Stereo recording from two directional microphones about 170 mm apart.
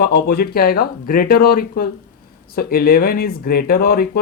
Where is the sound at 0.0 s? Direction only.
65° left (ahead or behind).